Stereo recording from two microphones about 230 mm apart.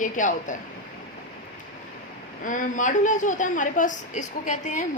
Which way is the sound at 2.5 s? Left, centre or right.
Left.